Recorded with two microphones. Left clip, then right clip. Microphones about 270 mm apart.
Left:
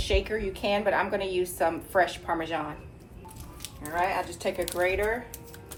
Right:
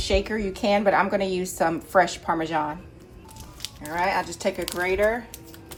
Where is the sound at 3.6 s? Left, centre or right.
Right.